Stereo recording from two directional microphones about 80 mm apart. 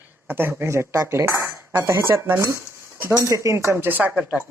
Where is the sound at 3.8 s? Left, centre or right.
Right.